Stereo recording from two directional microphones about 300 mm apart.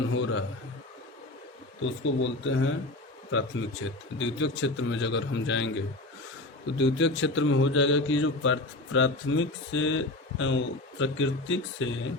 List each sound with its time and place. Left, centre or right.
0.1 s a man's voice: left
1.8 s a man's voice: left